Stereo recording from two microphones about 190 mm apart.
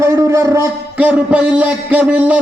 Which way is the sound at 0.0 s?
15° right (ahead or behind).